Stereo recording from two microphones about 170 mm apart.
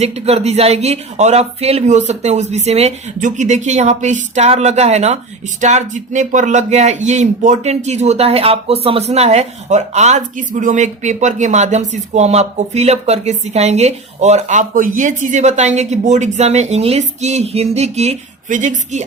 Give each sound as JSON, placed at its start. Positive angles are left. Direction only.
{"t": 0.0, "sound": "speech", "side_deg": -40}